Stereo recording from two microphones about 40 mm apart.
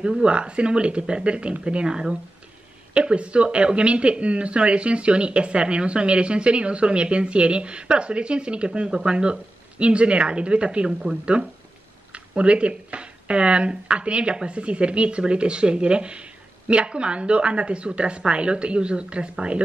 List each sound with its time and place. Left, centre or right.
0.0 s speech: right